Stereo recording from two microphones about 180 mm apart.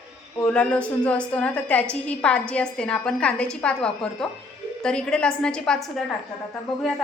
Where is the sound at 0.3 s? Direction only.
5° left (ahead or behind).